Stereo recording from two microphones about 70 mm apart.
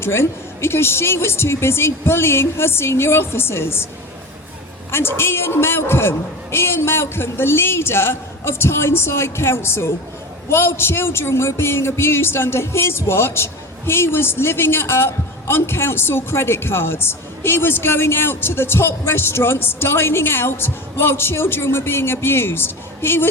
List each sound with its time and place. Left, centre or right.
0.0 s speech: left
4.9 s speech: left